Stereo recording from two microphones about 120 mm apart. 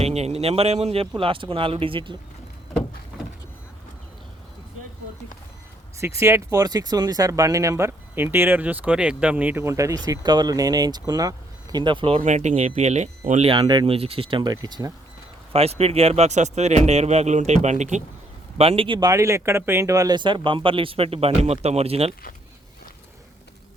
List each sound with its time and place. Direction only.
0.0 s speech: 60° right (ahead or behind)
1.1 s speech: 45° right (ahead or behind)
6.1 s speech: 20° right (ahead or behind); by 12.2 s 45° right (ahead or behind)
12.2 s speech: 75° right (ahead or behind)
13.5 s speech: 40° right (ahead or behind)
14.5 s speech: 30° right (ahead or behind)
15.5 s speech: 60° right (ahead or behind); by 18.0 s 80° right
18.5 s speech: 55° right (ahead or behind); by 19.1 s 40° right (ahead or behind)
19.1 s speech: 25° right (ahead or behind); by 22.1 s 55° right (ahead or behind)